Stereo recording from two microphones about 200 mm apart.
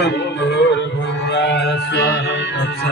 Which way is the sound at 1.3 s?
55° left (ahead or behind).